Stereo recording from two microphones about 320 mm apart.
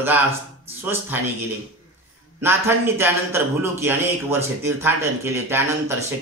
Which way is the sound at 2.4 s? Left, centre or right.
Centre.